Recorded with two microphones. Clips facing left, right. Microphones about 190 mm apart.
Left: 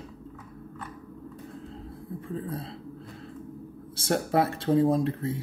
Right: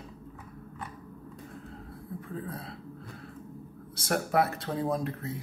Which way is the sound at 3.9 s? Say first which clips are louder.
Left 2 dB; 30° left (ahead or behind).